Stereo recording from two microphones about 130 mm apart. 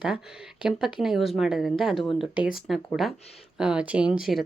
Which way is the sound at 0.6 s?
5° right (ahead or behind).